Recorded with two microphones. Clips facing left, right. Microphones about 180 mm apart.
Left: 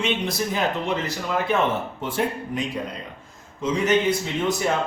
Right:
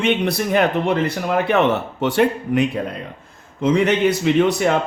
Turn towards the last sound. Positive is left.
turn(degrees=-70)  # may be behind; listen again after turning